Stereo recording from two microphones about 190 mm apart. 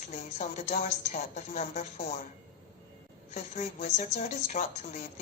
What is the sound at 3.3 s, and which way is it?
A woman's voice, 35° left (ahead or behind).